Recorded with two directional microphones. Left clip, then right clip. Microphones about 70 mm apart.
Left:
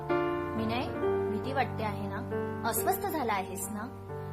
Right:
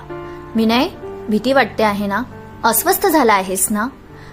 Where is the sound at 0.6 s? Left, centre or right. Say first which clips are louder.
Right 15 dB; right.